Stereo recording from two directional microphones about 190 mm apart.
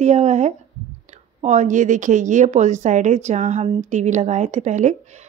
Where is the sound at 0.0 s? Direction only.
35° right (ahead or behind).